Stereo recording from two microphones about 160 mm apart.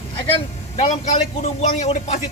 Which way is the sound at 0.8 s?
40° left (ahead or behind).